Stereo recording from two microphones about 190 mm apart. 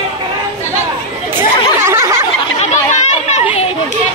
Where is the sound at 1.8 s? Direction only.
15° right (ahead or behind).